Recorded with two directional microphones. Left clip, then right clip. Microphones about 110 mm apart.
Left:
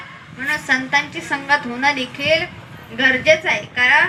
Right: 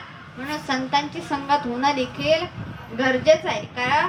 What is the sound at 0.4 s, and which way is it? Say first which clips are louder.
A woman's voice: left 8 dB; centre (ahead or behind).